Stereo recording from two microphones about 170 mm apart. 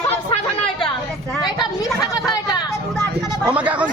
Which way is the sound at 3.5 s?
10° right (ahead or behind).